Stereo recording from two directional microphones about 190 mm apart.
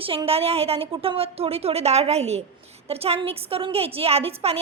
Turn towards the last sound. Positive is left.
turn(degrees=-30)  # may be behind; listen again after turning